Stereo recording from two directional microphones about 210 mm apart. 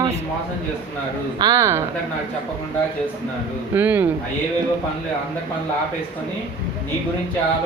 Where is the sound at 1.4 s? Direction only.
15° right (ahead or behind).